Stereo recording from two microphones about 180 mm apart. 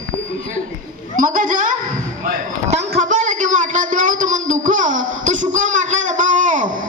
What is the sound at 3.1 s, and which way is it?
A woman's voice, 45° right (ahead or behind).